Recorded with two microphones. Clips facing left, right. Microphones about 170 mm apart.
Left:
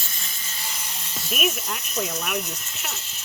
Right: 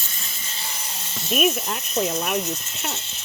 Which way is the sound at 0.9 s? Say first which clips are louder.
Right 6 dB; 30° right (ahead or behind).